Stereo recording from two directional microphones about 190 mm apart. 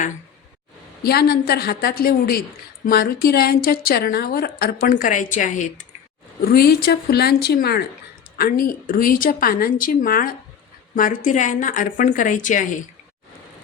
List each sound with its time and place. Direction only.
1.0 s a woman's voice: 55° left (ahead or behind)
6.4 s a woman's voice: 50° left (ahead or behind)